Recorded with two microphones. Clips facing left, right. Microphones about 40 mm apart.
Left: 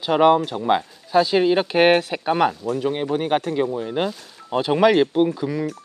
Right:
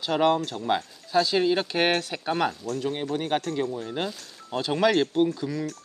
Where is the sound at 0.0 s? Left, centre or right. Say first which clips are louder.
Left 7 dB; centre.